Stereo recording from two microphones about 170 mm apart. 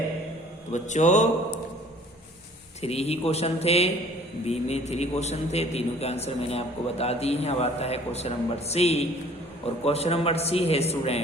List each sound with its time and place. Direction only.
0.7 s speech: 45° left (ahead or behind)
2.8 s a man's voice: 35° left (ahead or behind)